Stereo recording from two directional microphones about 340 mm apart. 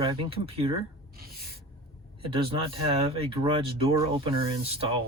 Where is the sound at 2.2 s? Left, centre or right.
Centre.